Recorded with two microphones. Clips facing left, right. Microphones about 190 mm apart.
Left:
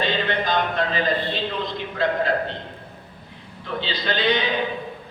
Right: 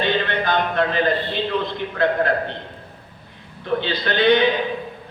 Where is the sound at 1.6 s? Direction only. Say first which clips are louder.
Right 3 dB; 55° right (ahead or behind).